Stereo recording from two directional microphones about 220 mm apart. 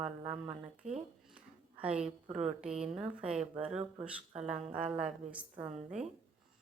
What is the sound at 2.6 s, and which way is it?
Speech, 5° right (ahead or behind).